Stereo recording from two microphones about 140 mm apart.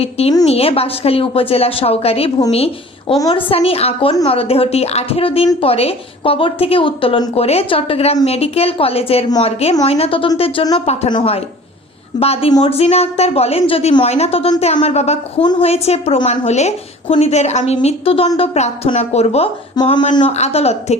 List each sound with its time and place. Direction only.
0.0 s a woman's voice: 45° left (ahead or behind)
19.8 s speech: 30° left (ahead or behind)
20.3 s a woman's voice: 50° left (ahead or behind)